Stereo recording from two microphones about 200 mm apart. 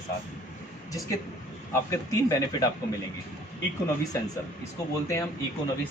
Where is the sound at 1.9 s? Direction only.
15° left (ahead or behind).